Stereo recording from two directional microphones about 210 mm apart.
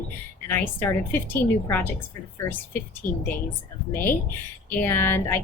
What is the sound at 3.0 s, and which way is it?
Speech, 40° left (ahead or behind).